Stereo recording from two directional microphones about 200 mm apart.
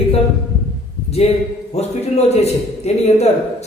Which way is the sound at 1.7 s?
30° left (ahead or behind).